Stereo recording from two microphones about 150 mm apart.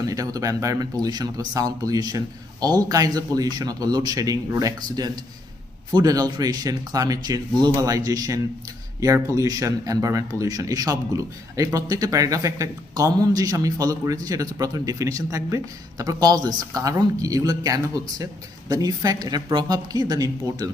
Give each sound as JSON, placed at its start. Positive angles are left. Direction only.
{"t": 0.1, "sound": "a man's voice", "side_deg": -25}